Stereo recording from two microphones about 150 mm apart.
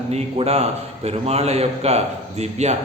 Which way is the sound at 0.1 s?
45° right (ahead or behind).